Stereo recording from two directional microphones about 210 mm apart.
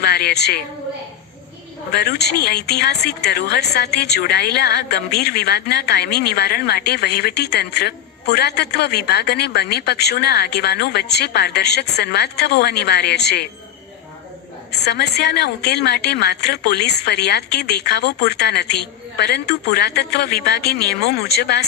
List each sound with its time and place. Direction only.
0.0 s a woman's voice: 50° left (ahead or behind)
1.9 s speech: 50° left (ahead or behind)
14.7 s speech: 50° left (ahead or behind)